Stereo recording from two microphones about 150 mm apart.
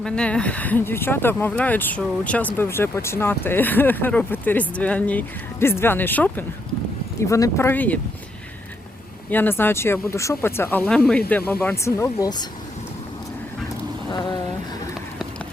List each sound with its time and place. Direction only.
0.0 s speech: 5° left (ahead or behind)
9.3 s speech: 15° left (ahead or behind)
14.1 s speech: 30° left (ahead or behind)